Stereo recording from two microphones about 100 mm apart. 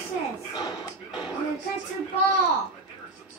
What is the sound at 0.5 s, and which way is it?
Music, 40° left (ahead or behind).